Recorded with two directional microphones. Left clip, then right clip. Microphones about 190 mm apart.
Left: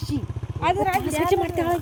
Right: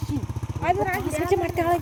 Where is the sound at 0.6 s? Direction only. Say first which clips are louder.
Left 2 dB; 65° left (ahead or behind).